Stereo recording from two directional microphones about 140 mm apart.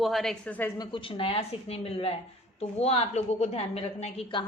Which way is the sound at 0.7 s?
30° left (ahead or behind).